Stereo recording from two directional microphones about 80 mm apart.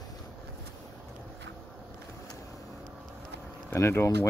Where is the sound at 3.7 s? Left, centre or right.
Left.